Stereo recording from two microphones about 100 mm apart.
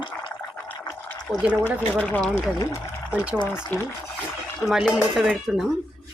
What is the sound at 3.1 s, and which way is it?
Speech, 15° right (ahead or behind).